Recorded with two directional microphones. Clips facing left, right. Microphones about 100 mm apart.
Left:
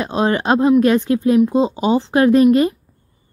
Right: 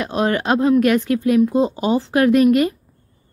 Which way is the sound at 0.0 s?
25° left (ahead or behind).